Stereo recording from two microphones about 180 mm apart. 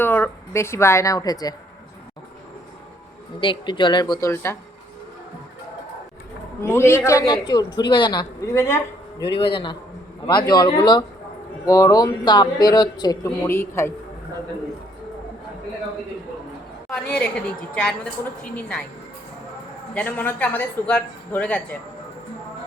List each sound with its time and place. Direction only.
0.0 s a woman's voice: 10° left (ahead or behind)
3.4 s a man's voice: 25° left (ahead or behind)
6.6 s a man's voice: 15° left (ahead or behind)
9.4 s a man's voice: 30° left (ahead or behind)
16.9 s a woman's voice: 5° left (ahead or behind)
19.9 s a man's voice: 10° left (ahead or behind)